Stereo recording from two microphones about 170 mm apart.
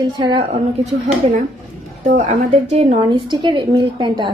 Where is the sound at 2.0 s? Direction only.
45° right (ahead or behind).